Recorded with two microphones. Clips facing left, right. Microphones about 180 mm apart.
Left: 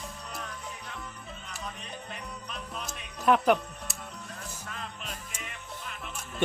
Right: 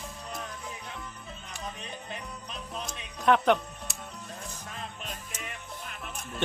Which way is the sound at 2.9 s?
5° left (ahead or behind).